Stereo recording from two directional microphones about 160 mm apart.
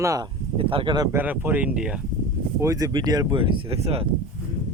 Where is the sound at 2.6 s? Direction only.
20° right (ahead or behind); by 4.1 s 35° right (ahead or behind).